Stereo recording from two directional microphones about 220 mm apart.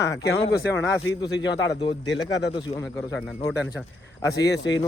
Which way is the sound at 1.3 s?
20° left (ahead or behind).